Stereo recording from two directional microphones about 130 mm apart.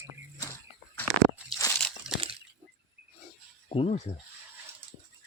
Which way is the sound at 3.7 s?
50° left (ahead or behind).